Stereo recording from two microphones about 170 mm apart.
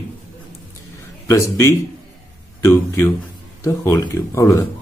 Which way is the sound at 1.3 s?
15° left (ahead or behind).